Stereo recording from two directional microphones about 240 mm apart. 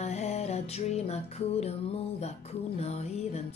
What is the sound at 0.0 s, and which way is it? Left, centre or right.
Music, left.